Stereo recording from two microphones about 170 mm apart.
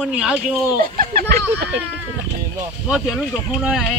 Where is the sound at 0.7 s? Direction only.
55° right (ahead or behind).